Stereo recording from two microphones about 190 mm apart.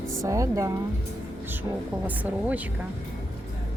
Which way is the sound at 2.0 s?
10° right (ahead or behind).